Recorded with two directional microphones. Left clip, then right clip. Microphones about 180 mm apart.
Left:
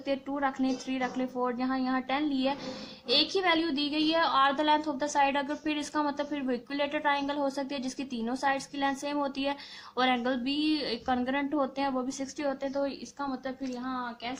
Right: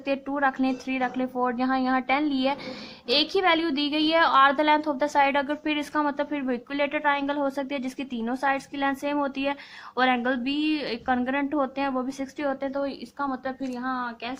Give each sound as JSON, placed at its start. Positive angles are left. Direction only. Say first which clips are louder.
{"t": 0.0, "sound": "a woman's voice", "louder": "right 6 dB", "side_deg": -30}